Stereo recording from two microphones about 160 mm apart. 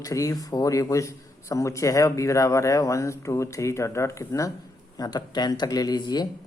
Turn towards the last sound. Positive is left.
turn(degrees=25)  # may be behind; listen again after turning